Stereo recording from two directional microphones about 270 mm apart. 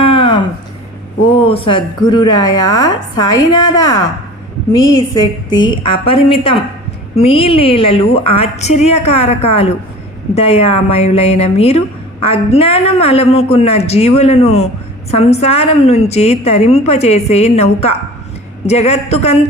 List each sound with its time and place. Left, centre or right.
0.0 s a sound: centre
1.4 s a woman's voice: centre
5.1 s a woman's voice: centre